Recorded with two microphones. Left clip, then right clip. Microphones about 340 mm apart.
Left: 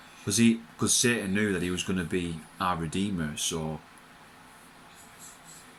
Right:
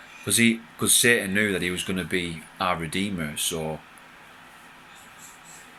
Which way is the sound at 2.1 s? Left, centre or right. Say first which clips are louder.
Right 4 dB; centre.